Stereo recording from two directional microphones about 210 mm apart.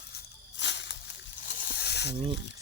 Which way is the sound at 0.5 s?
55° left (ahead or behind).